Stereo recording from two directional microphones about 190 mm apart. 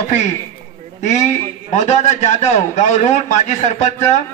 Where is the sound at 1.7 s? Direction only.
40° left (ahead or behind).